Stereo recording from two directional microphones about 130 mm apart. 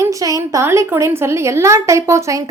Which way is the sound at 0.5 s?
20° right (ahead or behind).